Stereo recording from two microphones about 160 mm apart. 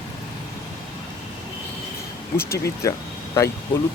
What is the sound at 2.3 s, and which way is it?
Speech, 75° left (ahead or behind).